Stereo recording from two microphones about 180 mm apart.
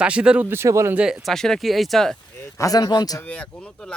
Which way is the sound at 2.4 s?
20° left (ahead or behind).